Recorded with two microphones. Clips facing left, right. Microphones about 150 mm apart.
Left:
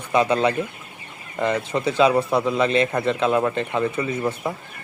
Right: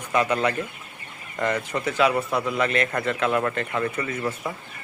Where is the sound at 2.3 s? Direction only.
20° left (ahead or behind).